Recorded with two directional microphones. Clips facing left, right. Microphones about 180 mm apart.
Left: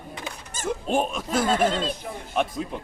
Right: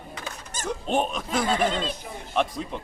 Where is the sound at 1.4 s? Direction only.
45° left (ahead or behind).